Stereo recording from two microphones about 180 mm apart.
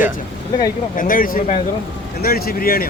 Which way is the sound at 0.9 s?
50° left (ahead or behind).